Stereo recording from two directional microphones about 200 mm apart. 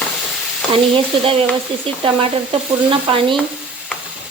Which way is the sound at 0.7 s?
25° right (ahead or behind).